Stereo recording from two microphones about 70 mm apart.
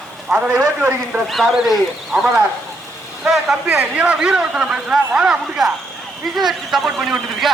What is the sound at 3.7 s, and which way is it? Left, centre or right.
A man's voice, right.